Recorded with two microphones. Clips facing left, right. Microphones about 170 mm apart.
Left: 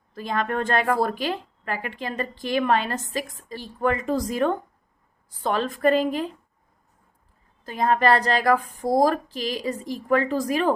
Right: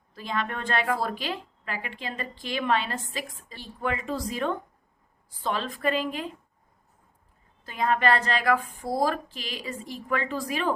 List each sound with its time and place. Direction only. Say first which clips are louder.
0.1 s a woman's voice: left 5 dB; 45° left (ahead or behind)
7.6 s a woman's voice: left 4 dB; 40° left (ahead or behind)